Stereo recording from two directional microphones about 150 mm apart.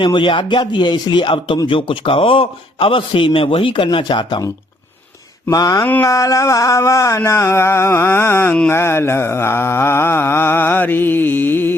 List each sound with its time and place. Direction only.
0.0 s speech: 30° left (ahead or behind)
5.5 s speech: 25° left (ahead or behind)
5.9 s a sound: 20° left (ahead or behind)